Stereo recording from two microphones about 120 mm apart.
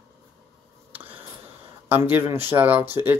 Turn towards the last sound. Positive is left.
turn(degrees=-15)  # may be behind; listen again after turning